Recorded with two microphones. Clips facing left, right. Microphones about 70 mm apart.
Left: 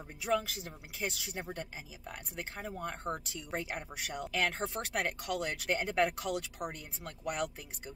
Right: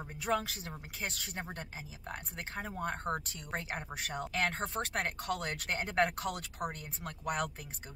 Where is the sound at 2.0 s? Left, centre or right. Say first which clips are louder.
Even; right.